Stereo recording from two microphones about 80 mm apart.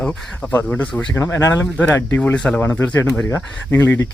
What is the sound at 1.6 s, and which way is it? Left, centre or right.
Speech, left.